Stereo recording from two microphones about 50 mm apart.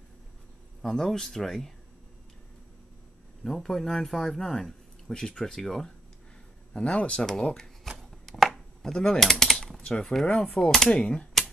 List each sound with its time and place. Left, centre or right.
0.8 s speech: centre
3.4 s speech: centre
6.7 s speech: left
7.2 s speech: centre
7.5 s shuffling cards: centre
8.0 s chopping: centre
8.9 s speech: centre
9.2 s typing: centre
9.8 s a sound: left
10.2 s speech: left